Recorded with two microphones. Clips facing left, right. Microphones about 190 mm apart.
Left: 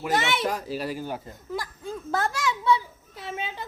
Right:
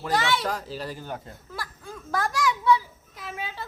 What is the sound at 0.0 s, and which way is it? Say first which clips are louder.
A child's voice: even; 20° left (ahead or behind).